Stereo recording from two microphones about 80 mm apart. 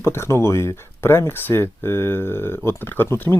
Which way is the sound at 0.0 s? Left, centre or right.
Left.